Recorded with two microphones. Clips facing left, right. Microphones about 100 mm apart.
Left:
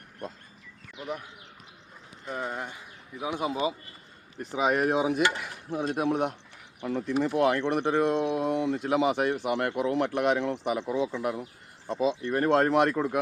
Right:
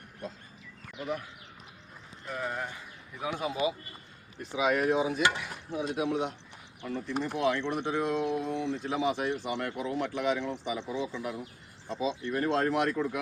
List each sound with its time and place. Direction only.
2.2 s speech: 30° left (ahead or behind)
4.4 s speech: 45° left (ahead or behind)
4.9 s speech: 60° left (ahead or behind)
7.3 s speech: 55° left (ahead or behind)
11.9 s speech: 50° left (ahead or behind)